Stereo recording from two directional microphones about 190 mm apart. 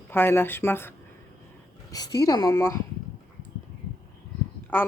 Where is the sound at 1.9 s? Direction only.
20° left (ahead or behind).